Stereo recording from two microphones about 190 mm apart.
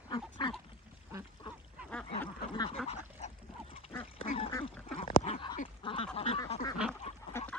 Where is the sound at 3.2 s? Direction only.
35° left (ahead or behind).